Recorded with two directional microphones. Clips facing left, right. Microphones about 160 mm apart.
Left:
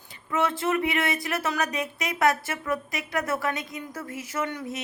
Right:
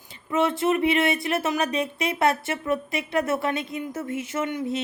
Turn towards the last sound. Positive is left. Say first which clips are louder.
# right 4 dB
turn(degrees=-25)  # may be behind; listen again after turning